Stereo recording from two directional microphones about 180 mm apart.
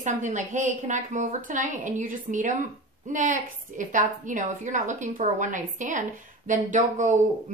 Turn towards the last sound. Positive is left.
turn(degrees=-45)  # may be behind; listen again after turning